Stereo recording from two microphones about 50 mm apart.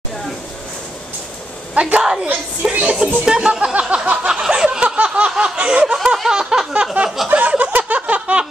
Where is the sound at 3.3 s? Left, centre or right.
Centre.